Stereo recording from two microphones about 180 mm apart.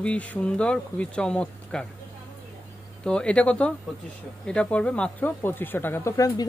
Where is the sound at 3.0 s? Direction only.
5° left (ahead or behind).